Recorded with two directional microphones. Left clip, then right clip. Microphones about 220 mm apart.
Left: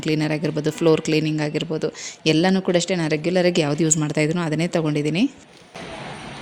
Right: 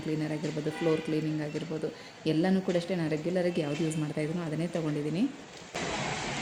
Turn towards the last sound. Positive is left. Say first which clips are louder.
# left 10 dB
turn(degrees=40)  # may be behind; listen again after turning